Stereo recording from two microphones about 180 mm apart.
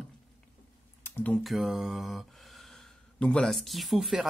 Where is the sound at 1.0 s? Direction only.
10° left (ahead or behind).